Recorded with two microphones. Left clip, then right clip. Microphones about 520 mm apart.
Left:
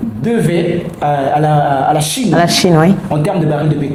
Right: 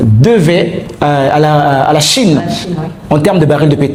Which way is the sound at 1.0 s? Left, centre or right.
Right.